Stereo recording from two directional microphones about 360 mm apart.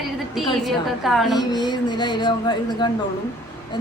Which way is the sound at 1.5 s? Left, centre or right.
Centre.